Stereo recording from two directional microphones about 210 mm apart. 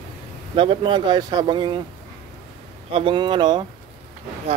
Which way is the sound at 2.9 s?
25° right (ahead or behind).